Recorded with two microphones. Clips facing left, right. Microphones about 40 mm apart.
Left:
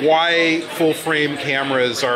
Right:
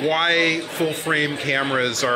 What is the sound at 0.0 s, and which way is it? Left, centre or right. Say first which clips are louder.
A man's voice: left 4 dB; centre.